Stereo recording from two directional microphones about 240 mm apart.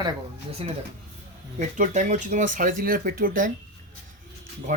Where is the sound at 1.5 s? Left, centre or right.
Right.